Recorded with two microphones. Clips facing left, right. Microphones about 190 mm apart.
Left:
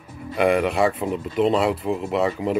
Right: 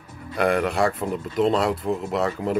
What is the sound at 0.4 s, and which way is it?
Speech, 5° left (ahead or behind).